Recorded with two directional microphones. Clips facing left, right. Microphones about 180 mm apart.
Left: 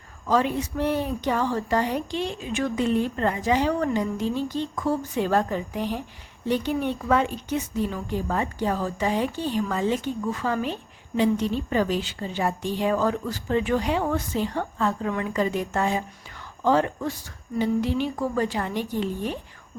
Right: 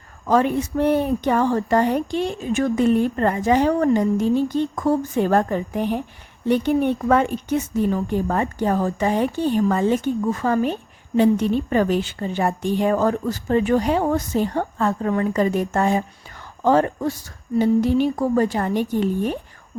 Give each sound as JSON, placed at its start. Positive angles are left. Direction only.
{"t": 0.3, "sound": "a woman's voice", "side_deg": -55}